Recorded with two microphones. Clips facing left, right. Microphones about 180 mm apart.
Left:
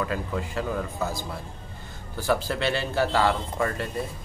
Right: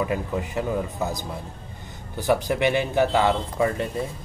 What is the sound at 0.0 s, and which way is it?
Speech, 20° right (ahead or behind).